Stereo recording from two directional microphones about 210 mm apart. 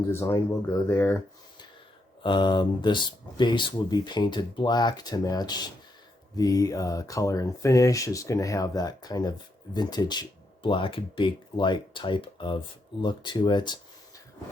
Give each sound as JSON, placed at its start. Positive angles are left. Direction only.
{"t": 0.1, "sound": "speech", "side_deg": 10}